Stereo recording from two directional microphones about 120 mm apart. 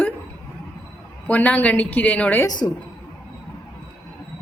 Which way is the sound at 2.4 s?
30° left (ahead or behind).